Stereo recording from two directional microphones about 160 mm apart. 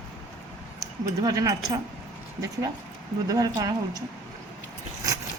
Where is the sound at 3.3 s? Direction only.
20° right (ahead or behind).